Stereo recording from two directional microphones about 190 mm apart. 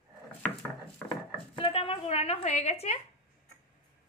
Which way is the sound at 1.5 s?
30° left (ahead or behind).